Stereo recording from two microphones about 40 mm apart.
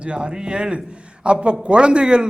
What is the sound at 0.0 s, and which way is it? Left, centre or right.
A man's voice, right.